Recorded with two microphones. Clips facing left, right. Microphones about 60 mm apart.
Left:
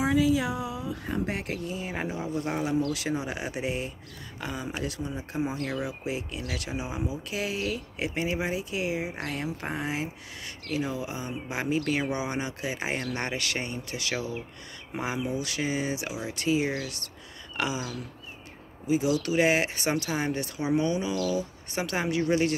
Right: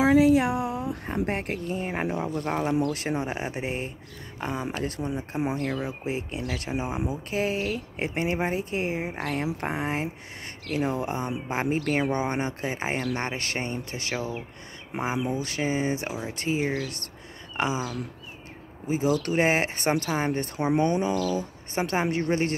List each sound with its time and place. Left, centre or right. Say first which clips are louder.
0.0 s speech: right 5 dB; right
1.0 s speech: right 1 dB; right
10.7 s speech: right 4 dB; right
15.2 s speech: right 2 dB; right
16.6 s speech: right 2 dB; centre
17.6 s speech: right 3 dB; right
18.9 s speech: right 1 dB; right